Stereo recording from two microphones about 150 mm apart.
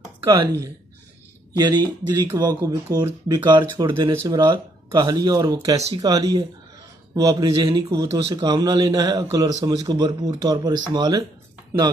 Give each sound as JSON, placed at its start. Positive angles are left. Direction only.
{"t": 0.3, "sound": "a man's voice", "side_deg": -20}
{"t": 4.1, "sound": "speech", "side_deg": -15}
{"t": 4.4, "sound": "a man's voice", "side_deg": -30}